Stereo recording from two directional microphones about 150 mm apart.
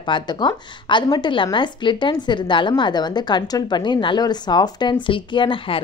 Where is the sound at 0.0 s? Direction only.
30° left (ahead or behind).